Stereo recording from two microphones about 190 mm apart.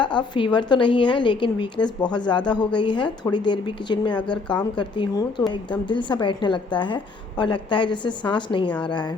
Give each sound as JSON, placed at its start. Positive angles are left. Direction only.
{"t": 0.0, "sound": "a woman's voice", "side_deg": 25}